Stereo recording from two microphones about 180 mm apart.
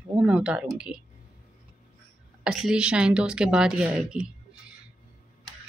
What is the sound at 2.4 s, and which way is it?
Speech, 5° right (ahead or behind).